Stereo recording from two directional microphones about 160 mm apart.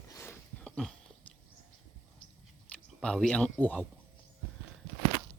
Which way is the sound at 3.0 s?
5° left (ahead or behind).